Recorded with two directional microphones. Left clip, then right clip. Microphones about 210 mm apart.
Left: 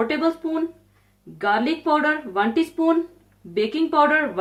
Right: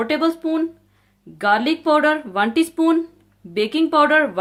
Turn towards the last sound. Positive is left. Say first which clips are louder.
# right 3 dB
turn(degrees=-50)  # may be behind; listen again after turning